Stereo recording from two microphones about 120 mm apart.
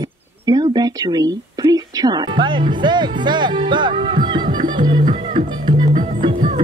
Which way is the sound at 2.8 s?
40° right (ahead or behind).